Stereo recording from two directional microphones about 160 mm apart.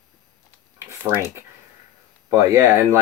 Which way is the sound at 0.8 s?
15° right (ahead or behind).